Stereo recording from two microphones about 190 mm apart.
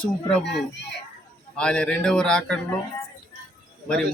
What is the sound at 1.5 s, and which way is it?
Speech, 5° left (ahead or behind).